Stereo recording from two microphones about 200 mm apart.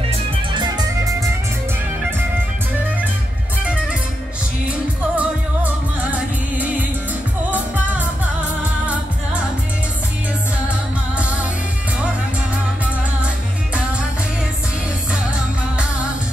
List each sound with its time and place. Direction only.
0.1 s music: 25° right (ahead or behind)
4.6 s music: 5° right (ahead or behind)